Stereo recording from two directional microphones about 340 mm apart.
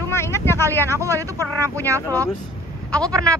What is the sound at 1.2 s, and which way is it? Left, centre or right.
Speech, centre.